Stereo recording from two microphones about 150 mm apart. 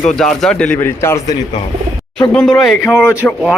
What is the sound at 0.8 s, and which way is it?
Speech, 15° left (ahead or behind).